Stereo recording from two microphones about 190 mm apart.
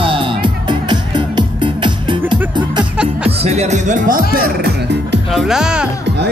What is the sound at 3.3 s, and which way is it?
Speech, 35° right (ahead or behind).